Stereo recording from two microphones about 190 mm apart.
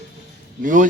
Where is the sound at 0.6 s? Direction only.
45° right (ahead or behind).